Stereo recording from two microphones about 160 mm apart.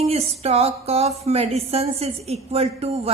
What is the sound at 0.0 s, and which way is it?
Music, 40° right (ahead or behind).